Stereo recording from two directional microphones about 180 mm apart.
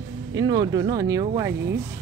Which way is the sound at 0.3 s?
20° right (ahead or behind).